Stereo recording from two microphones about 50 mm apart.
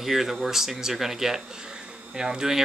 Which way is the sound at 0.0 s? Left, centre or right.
Centre.